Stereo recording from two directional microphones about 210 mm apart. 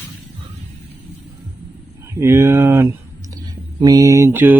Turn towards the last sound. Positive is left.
turn(degrees=-10)  # may be behind; listen again after turning